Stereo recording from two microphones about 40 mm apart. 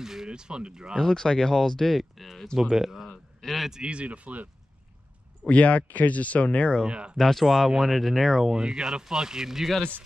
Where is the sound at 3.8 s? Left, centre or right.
Right.